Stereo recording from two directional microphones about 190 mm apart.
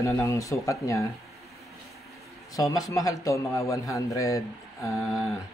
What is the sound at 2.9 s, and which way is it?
Speech, 15° left (ahead or behind).